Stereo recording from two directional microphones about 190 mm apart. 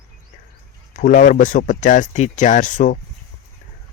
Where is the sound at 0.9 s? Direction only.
45° left (ahead or behind).